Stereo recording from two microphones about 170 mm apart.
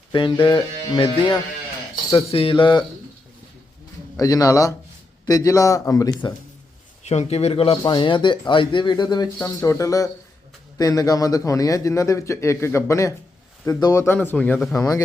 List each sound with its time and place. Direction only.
0.1 s speech: 30° left (ahead or behind)
4.2 s speech: 20° left (ahead or behind)
7.1 s speech: 40° left (ahead or behind); by 14.8 s 5° left (ahead or behind)
14.8 s speech: 20° left (ahead or behind)